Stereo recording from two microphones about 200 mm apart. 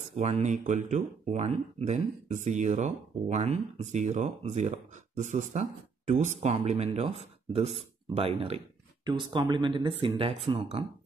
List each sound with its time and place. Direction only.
0.1 s speech: 35° right (ahead or behind)